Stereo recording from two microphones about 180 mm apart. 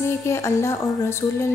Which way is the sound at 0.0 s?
15° left (ahead or behind).